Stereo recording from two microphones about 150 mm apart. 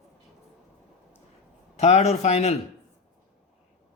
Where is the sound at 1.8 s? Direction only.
45° left (ahead or behind).